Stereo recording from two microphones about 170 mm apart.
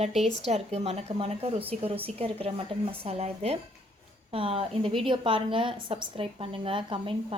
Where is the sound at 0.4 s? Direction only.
40° right (ahead or behind).